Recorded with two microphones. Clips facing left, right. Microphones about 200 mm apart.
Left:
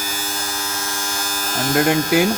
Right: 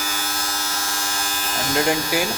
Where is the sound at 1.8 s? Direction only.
55° left (ahead or behind).